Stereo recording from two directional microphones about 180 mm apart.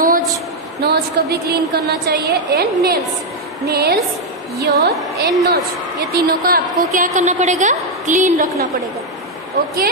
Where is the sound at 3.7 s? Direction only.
60° right (ahead or behind).